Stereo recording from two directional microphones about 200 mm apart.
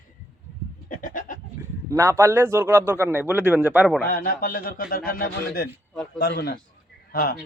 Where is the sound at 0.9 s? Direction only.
40° left (ahead or behind).